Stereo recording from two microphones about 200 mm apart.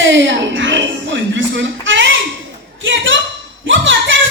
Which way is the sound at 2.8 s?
65° right (ahead or behind).